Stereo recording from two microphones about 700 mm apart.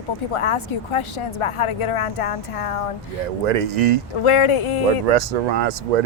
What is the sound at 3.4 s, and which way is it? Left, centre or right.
Speech, right.